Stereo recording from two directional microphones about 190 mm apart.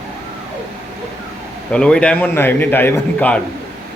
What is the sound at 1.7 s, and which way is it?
A man's voice, 5° left (ahead or behind).